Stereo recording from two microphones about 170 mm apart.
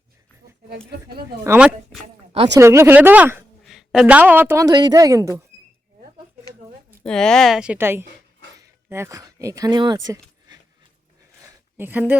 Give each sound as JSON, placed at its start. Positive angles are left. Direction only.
{"t": 1.5, "sound": "a woman's voice", "side_deg": -5}
{"t": 2.6, "sound": "a woman's voice", "side_deg": -15}
{"t": 7.0, "sound": "a woman's voice", "side_deg": 5}
{"t": 11.8, "sound": "speech", "side_deg": -10}